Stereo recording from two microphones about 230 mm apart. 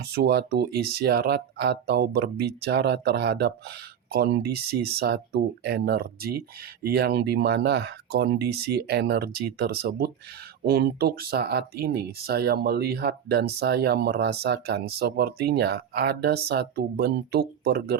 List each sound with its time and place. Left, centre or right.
0.0 s speech: right